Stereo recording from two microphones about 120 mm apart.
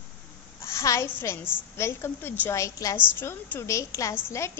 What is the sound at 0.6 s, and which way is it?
A woman's voice, 25° left (ahead or behind).